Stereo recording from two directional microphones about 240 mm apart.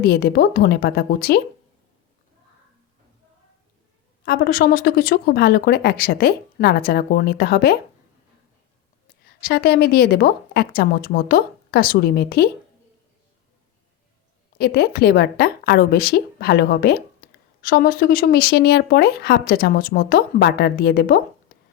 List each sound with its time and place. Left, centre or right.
0.0 s a woman's voice: left
4.2 s a woman's voice: left
9.4 s a woman's voice: left
14.6 s a woman's voice: left